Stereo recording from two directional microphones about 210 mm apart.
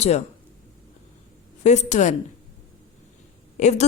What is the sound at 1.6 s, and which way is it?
Speech, 35° left (ahead or behind).